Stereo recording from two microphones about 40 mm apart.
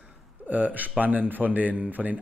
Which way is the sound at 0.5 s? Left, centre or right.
Right.